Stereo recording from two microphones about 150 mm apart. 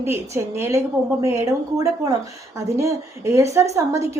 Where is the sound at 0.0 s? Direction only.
15° right (ahead or behind).